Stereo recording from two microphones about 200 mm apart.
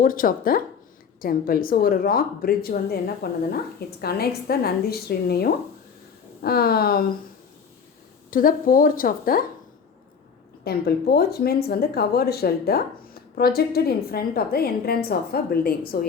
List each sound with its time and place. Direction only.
0.0 s speech: 45° left (ahead or behind)
8.3 s speech: 45° left (ahead or behind)
10.6 s speech: 50° left (ahead or behind)